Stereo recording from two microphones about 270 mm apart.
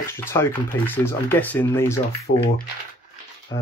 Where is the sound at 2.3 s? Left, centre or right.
Left.